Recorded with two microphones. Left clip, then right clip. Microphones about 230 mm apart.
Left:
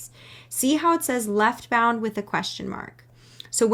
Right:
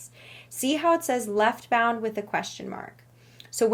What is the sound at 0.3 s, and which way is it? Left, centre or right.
Speech, centre.